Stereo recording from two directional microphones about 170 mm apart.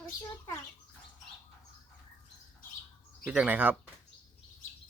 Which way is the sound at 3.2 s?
10° right (ahead or behind).